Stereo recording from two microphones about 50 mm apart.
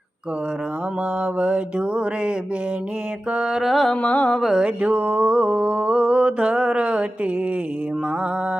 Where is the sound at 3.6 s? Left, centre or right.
Centre.